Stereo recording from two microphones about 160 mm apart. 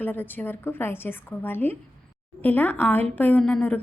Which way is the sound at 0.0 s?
10° left (ahead or behind).